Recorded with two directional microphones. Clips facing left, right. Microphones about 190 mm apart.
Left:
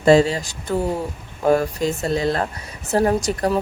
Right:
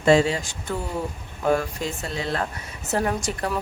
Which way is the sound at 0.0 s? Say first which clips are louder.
Left 4 dB; 35° left (ahead or behind).